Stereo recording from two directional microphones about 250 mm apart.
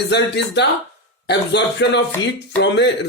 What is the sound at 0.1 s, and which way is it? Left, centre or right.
A man's voice, left.